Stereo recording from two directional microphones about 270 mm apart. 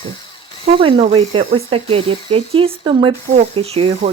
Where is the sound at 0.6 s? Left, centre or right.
Centre.